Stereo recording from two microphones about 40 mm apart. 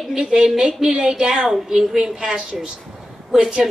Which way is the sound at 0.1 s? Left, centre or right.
Centre.